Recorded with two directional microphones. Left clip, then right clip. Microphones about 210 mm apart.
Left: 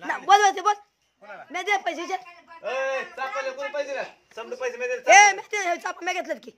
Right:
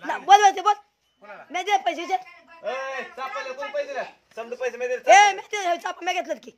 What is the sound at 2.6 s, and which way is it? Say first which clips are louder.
Speech: left 3 dB; 40° left (ahead or behind).